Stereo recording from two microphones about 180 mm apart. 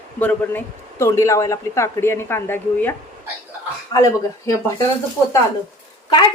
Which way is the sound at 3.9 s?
25° left (ahead or behind).